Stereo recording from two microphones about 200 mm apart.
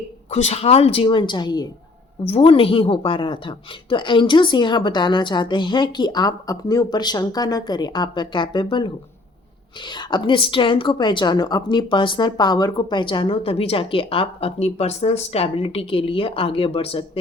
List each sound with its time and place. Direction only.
0.3 s a woman's voice: 35° left (ahead or behind)
9.9 s a woman's voice: 20° left (ahead or behind)